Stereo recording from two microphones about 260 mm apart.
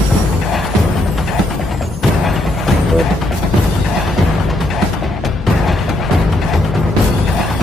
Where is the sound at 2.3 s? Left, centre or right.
Centre.